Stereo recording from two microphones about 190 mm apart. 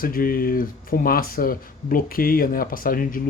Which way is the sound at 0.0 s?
50° left (ahead or behind).